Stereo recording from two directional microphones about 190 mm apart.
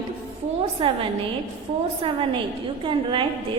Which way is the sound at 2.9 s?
25° right (ahead or behind).